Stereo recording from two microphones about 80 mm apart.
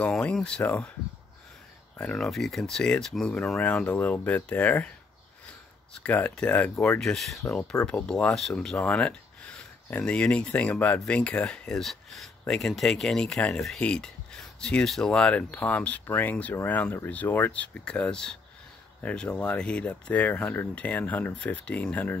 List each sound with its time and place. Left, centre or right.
0.0 s speech: centre
2.0 s speech: centre
6.0 s speech: centre
7.0 s speech: centre
7.8 s speech: centre
8.4 s speech: centre